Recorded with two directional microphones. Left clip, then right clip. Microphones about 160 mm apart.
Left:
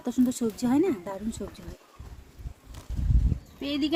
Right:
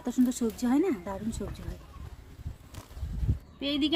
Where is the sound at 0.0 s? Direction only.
20° left (ahead or behind).